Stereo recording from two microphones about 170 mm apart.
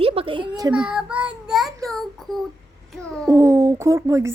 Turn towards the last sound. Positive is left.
turn(degrees=-15)  # may be behind; listen again after turning